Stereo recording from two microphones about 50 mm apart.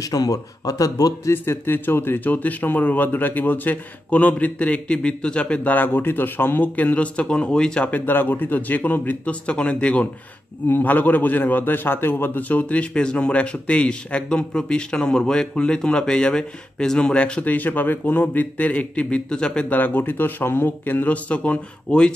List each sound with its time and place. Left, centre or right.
1.3 s a man's voice: left
6.8 s a man's voice: left
7.9 s a man's voice: left
10.7 s a man's voice: left; by 17.0 s centre
17.0 s a man's voice: left
17.5 s a man's voice: left; by 19.7 s centre
19.7 s a man's voice: left